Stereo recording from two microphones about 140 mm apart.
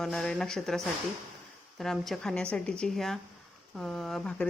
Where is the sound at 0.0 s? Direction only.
5° left (ahead or behind).